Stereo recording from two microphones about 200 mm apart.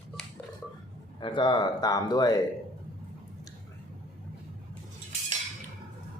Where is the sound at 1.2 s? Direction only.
25° left (ahead or behind).